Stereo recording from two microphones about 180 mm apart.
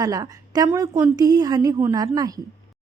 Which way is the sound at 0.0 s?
20° right (ahead or behind).